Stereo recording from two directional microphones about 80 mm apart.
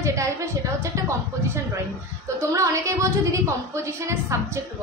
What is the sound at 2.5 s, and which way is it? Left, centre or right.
A woman's voice, right.